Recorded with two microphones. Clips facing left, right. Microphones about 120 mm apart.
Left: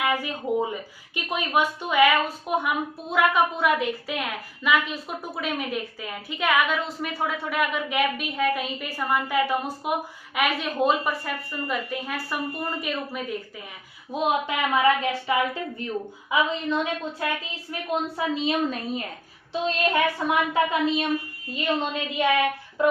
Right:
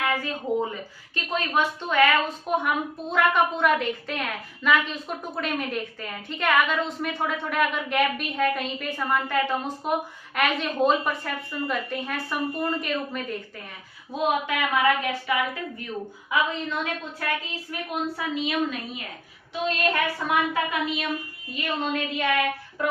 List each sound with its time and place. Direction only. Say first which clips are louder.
0.0 s speech: left 1 dB; 15° left (ahead or behind)
14.1 s speech: even; 20° left (ahead or behind)
18.2 s a woman's voice: left 2 dB; 30° left (ahead or behind)
19.6 s speech: left 2 dB; 25° left (ahead or behind)